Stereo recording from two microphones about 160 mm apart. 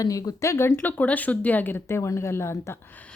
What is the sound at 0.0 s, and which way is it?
Speech, 20° left (ahead or behind).